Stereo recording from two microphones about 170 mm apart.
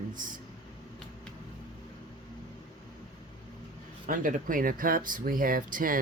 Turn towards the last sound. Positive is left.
turn(degrees=-55)  # may be behind; listen again after turning